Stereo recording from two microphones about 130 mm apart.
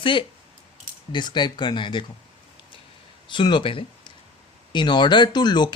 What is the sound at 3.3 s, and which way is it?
Speech, 35° left (ahead or behind).